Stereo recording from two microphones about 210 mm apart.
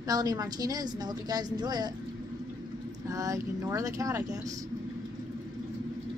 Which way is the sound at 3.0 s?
15° right (ahead or behind).